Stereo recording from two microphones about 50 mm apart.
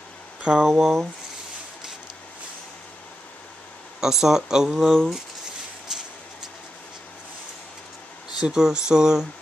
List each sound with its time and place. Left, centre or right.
0.4 s speech: centre
4.0 s speech: centre
5.9 s a sound: centre
8.4 s speech: centre